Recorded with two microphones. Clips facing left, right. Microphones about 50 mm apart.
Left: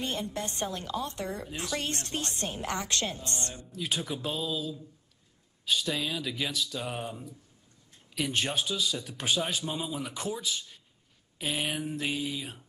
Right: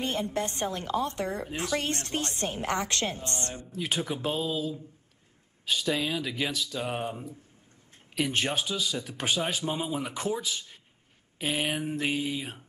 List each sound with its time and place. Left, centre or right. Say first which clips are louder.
0.0 s a woman's voice: right 4 dB; right